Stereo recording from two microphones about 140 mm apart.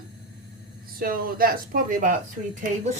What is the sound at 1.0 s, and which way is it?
A woman's voice, 90° right.